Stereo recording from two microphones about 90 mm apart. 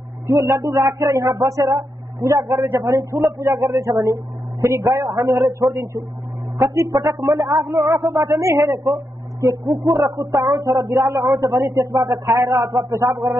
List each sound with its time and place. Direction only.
0.3 s a man's voice: 35° right (ahead or behind)
8.9 s a sound: 40° right (ahead or behind)
9.8 s a man's voice: 40° right (ahead or behind)